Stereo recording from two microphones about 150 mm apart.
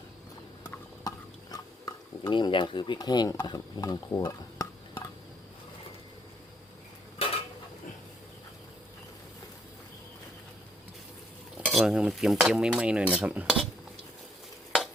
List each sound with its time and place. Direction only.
0.7 s stir: 25° left (ahead or behind)
11.6 s cutlery: centre (ahead or behind)